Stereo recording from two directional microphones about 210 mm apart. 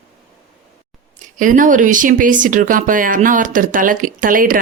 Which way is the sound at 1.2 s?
40° right (ahead or behind).